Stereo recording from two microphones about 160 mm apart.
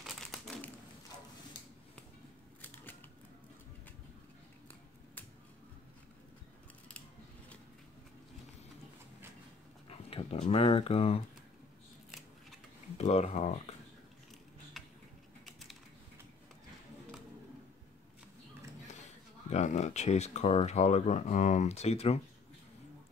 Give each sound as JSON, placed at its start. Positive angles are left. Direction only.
{"t": 0.0, "sound": "crumpling", "side_deg": 0}
{"t": 2.6, "sound": "typewriter", "side_deg": 10}
{"t": 9.8, "sound": "speech", "side_deg": 35}
{"t": 12.1, "sound": "scissors", "side_deg": 0}
{"t": 12.9, "sound": "speech", "side_deg": 40}
{"t": 15.4, "sound": "a sound", "side_deg": 0}
{"t": 19.5, "sound": "speech", "side_deg": 45}